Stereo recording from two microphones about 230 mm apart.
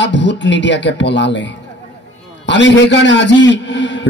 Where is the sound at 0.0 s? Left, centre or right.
Left.